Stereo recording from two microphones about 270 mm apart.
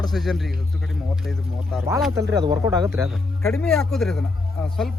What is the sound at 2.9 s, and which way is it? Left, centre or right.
Speech, centre.